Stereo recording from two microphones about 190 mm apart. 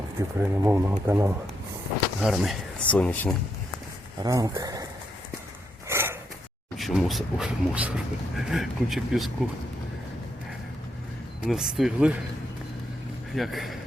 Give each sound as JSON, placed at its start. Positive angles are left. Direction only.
{"t": 0.2, "sound": "speech", "side_deg": -15}
{"t": 2.2, "sound": "speech", "side_deg": 0}
{"t": 4.2, "sound": "speech", "side_deg": -20}
{"t": 5.9, "sound": "a sound", "side_deg": -10}
{"t": 6.7, "sound": "speech", "side_deg": 0}
{"t": 11.3, "sound": "speech", "side_deg": -5}
{"t": 13.3, "sound": "speech", "side_deg": 0}